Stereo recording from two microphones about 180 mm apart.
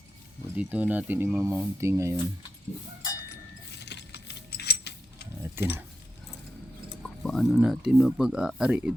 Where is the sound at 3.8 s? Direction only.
70° left (ahead or behind).